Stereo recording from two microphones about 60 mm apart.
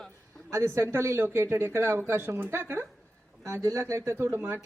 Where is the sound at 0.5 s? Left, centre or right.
Right.